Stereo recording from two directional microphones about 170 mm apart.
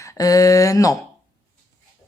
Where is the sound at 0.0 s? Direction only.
20° left (ahead or behind).